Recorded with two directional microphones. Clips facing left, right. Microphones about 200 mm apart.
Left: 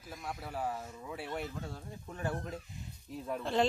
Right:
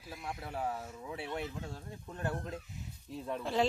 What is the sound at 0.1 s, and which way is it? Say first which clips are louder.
Speech: even; centre (ahead or behind).